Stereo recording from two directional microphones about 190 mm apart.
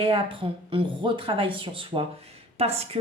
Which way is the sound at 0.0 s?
30° right (ahead or behind).